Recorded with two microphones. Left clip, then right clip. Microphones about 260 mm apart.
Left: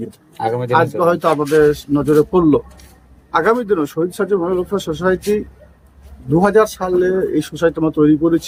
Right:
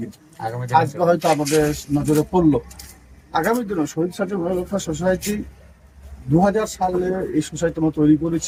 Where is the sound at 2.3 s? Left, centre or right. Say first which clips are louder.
Left 4 dB; left.